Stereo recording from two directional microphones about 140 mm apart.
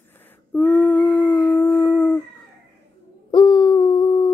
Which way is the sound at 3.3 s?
35° left (ahead or behind).